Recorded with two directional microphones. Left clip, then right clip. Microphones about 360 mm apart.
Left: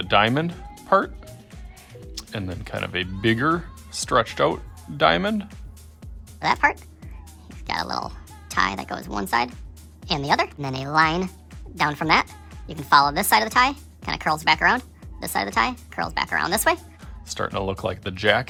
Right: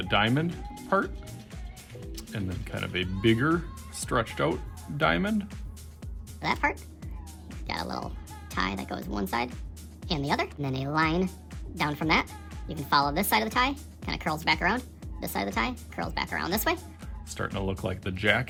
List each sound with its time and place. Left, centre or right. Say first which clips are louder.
0.0 s a woman's voice: left 7 dB; centre
1.2 s music: left 1 dB; centre
2.1 s a woman's voice: left 6 dB; centre
7.0 s music: even; centre
7.7 s a woman's voice: left 7 dB; centre